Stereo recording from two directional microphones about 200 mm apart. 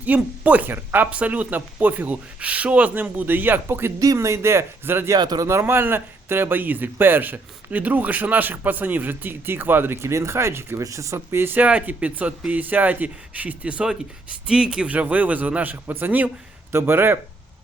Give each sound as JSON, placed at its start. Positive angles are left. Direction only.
{"t": 0.0, "sound": "speech", "side_deg": -10}